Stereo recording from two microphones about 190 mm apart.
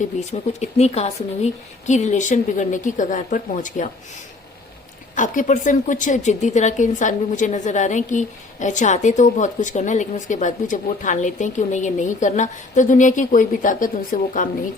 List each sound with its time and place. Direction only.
0.0 s a woman's voice: 35° left (ahead or behind)
5.1 s a woman's voice: 40° left (ahead or behind)